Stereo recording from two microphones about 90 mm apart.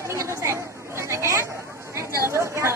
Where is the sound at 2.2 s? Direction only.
30° right (ahead or behind).